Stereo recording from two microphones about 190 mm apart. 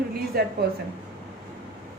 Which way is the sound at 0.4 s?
55° right (ahead or behind).